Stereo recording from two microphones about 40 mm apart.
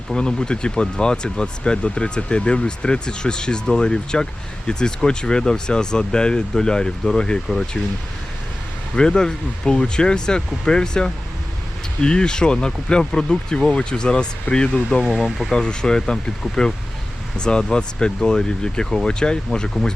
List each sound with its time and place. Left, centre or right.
0.1 s speech: centre
9.0 s speech: centre
15.0 s speech: centre
15.5 s speech: left
17.3 s speech: left